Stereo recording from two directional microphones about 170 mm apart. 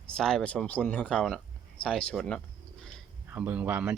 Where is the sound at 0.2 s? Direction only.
5° left (ahead or behind).